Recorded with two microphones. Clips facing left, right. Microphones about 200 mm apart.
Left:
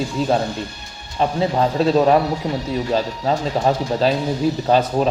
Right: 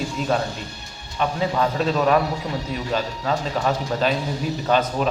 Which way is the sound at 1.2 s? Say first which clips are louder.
Left 4 dB; 30° left (ahead or behind).